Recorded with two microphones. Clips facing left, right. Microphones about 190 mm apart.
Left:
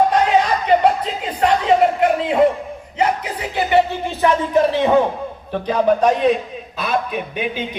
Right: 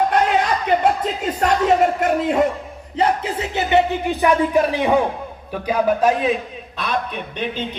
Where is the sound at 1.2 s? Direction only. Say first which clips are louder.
Left 1 dB; 45° right (ahead or behind).